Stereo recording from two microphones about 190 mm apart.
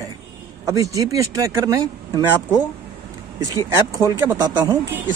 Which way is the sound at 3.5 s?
15° right (ahead or behind).